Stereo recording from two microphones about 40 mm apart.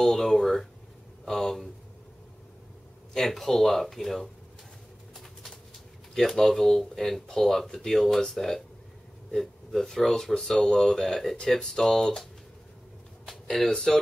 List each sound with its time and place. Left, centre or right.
0.0 s speech: centre
3.1 s speech: centre
6.1 s speech: centre
13.3 s a sound: centre
13.7 s speech: centre